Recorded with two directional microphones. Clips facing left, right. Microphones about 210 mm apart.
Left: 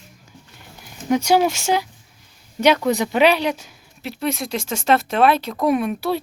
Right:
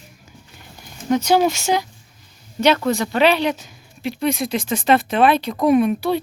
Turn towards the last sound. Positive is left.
turn(degrees=0)  # may be behind; listen again after turning